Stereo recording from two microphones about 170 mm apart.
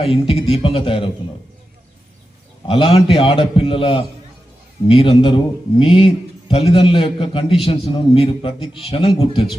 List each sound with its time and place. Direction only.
0.0 s a man's voice: 35° left (ahead or behind)
2.6 s a man's voice: 35° left (ahead or behind)